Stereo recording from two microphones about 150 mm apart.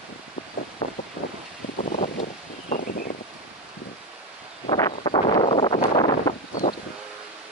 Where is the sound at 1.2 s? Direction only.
90° left.